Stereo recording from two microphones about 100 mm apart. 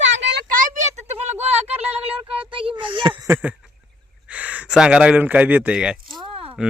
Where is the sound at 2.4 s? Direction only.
60° right (ahead or behind).